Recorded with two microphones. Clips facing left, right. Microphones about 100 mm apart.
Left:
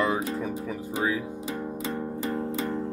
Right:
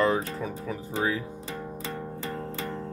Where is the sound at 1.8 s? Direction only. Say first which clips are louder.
Left 6 dB; 15° left (ahead or behind).